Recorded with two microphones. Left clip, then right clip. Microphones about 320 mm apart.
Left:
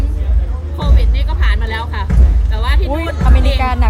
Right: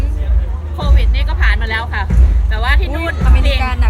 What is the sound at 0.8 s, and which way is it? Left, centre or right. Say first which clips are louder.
Music: right 1 dB; centre.